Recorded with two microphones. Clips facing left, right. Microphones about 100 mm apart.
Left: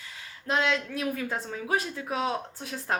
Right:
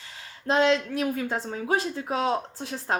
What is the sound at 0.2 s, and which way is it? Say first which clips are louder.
A woman's voice: right 5 dB; 30° right (ahead or behind).